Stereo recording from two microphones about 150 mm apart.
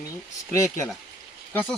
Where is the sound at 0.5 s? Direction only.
20° left (ahead or behind).